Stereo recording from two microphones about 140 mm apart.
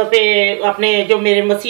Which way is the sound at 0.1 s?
50° right (ahead or behind).